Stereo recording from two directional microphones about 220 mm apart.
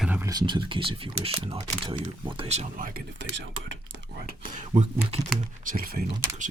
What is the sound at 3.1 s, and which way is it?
Speech, 55° right (ahead or behind).